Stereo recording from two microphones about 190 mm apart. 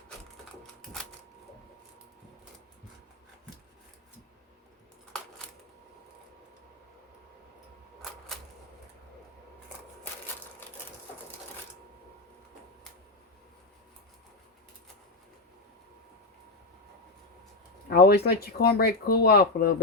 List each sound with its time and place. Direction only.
17.8 s speech: 55° left (ahead or behind)